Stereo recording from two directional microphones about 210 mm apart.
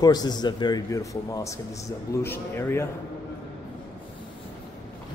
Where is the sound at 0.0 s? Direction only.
20° left (ahead or behind).